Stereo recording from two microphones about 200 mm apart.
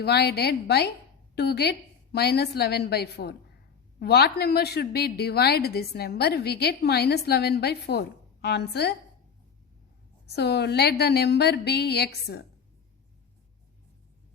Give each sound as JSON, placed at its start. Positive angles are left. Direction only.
{"t": 0.0, "sound": "a woman's voice", "side_deg": 55}
{"t": 10.2, "sound": "a woman's voice", "side_deg": 55}